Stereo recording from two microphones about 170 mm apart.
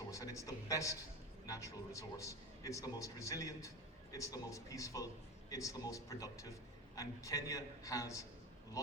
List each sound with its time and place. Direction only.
0.1 s a man's voice: 20° left (ahead or behind)